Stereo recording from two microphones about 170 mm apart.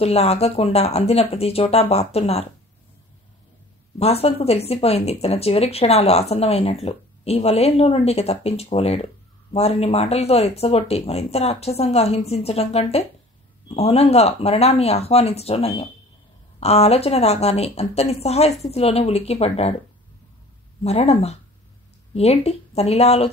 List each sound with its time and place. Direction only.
0.0 s speech: 35° left (ahead or behind)
4.0 s speech: 35° left (ahead or behind)
20.8 s speech: 35° left (ahead or behind)